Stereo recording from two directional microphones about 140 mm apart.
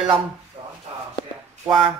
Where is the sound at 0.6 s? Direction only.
40° right (ahead or behind).